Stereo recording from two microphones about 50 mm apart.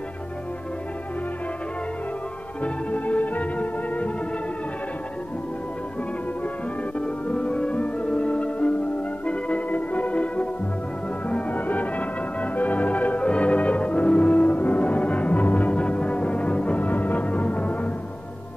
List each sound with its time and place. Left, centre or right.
2.6 s music: left
7.0 s music: left